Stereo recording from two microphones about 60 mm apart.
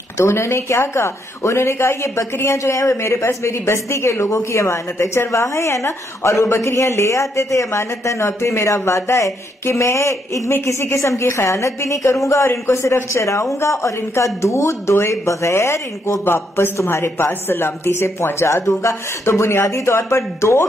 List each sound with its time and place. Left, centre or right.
0.2 s speech: left
3.0 s speech: left